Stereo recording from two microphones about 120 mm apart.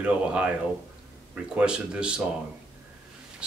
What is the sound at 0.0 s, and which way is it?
Speech, 10° right (ahead or behind).